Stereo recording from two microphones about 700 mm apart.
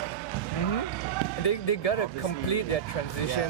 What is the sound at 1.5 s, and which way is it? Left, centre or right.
Speech, left.